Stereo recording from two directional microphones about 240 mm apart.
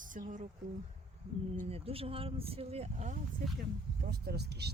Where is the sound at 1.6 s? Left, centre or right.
Right.